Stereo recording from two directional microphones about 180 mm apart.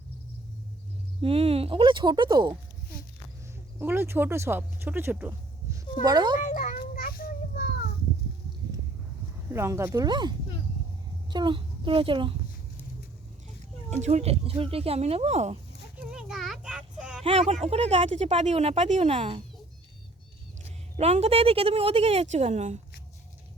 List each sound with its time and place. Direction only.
1.2 s speech: 35° right (ahead or behind)
3.8 s speech: 10° right (ahead or behind)
6.0 s speech: 25° right (ahead or behind)
6.4 s children playing: 45° left (ahead or behind)
9.5 s a child's voice: 15° right (ahead or behind)
14.0 s a woman's voice: 40° right (ahead or behind)
16.0 s a sound: 5° right (ahead or behind)
17.5 s a woman's voice: 35° right (ahead or behind)
20.6 s a woman's voice: 40° right (ahead or behind)